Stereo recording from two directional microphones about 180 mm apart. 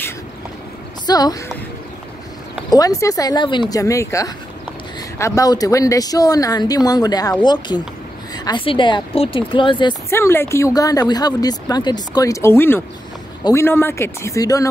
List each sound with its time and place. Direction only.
1.0 s a woman's voice: 20° left (ahead or behind)
2.7 s speech: 20° left (ahead or behind)
10.0 s speech: 15° left (ahead or behind)